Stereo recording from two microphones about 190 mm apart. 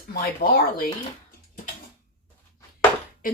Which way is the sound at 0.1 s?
50° left (ahead or behind).